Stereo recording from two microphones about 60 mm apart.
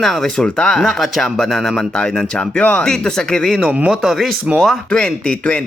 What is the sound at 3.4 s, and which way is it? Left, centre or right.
Speech, centre.